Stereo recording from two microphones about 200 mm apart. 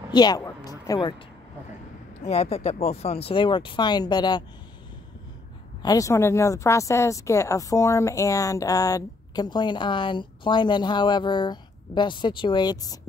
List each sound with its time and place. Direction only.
0.1 s a sound: 20° left (ahead or behind)
2.2 s speech: 30° left (ahead or behind)
5.8 s speech: 20° left (ahead or behind)